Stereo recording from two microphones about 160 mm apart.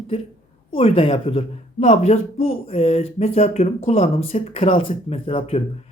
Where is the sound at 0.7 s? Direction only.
35° left (ahead or behind).